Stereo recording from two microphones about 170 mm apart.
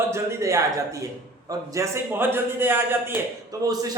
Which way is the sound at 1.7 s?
15° right (ahead or behind).